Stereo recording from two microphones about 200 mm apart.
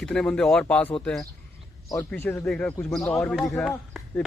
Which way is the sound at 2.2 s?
5° left (ahead or behind).